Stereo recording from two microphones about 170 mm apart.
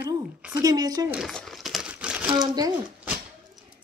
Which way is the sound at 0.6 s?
20° right (ahead or behind).